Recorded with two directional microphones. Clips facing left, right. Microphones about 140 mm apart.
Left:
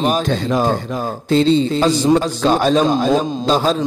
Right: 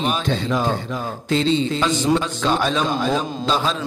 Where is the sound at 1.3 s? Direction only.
35° left (ahead or behind).